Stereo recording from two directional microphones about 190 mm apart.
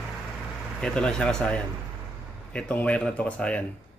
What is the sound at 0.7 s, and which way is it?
Speech, 5° left (ahead or behind).